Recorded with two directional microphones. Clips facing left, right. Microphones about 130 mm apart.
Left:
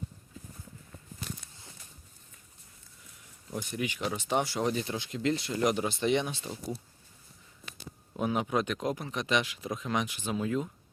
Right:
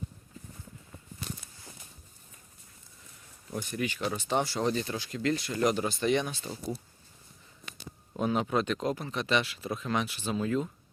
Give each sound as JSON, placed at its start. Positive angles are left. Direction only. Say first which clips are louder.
{"t": 3.5, "sound": "speech", "louder": "right 1 dB", "side_deg": 15}
{"t": 6.4, "sound": "speech", "louder": "right 1 dB", "side_deg": 5}
{"t": 7.6, "sound": "a sound", "louder": "right 1 dB", "side_deg": 0}
{"t": 8.2, "sound": "speech", "louder": "right 1 dB", "side_deg": 10}